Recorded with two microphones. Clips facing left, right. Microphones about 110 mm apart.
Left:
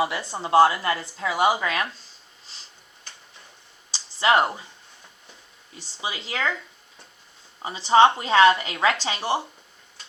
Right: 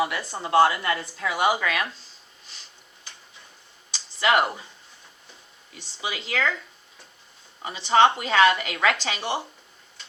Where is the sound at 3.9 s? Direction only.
30° left (ahead or behind).